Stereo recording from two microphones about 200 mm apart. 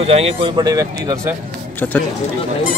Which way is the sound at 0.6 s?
20° right (ahead or behind).